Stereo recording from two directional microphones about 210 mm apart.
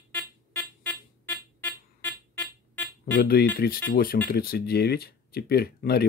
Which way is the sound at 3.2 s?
50° left (ahead or behind).